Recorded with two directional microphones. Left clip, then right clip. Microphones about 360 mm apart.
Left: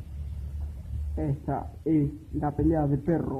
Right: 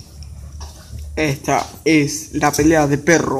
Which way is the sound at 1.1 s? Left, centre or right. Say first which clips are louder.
Right 14 dB; centre.